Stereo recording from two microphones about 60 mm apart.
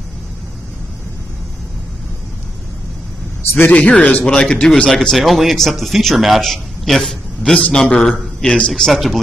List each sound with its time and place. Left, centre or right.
3.4 s a sound: left
3.7 s speech: left
5.1 s a man's voice: centre